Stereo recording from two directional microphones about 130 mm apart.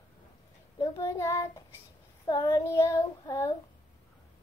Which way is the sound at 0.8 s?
25° left (ahead or behind).